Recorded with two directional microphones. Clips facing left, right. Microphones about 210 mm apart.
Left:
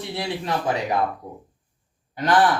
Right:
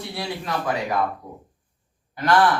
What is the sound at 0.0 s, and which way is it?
Speech, 20° left (ahead or behind).